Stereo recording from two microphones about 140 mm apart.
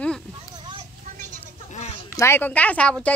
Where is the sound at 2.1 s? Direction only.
15° left (ahead or behind).